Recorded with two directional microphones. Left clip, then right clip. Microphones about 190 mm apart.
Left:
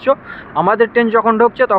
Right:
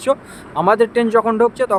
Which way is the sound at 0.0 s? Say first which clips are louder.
Left 3 dB; 15° right (ahead or behind).